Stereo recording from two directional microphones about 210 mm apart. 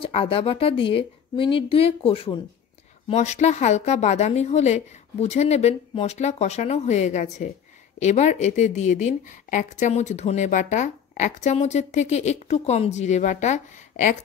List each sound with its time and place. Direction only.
0.0 s a woman's voice: 25° left (ahead or behind)